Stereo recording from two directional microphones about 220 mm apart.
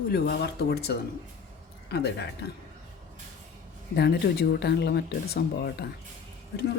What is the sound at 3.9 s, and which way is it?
Speech, 45° left (ahead or behind).